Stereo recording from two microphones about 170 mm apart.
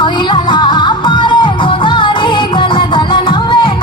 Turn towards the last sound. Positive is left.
turn(degrees=30)  # may be behind; listen again after turning